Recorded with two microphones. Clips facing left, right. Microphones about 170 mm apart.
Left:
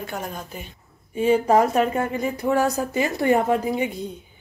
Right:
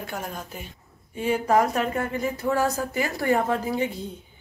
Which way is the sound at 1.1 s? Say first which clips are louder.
Left 4 dB; 25° left (ahead or behind).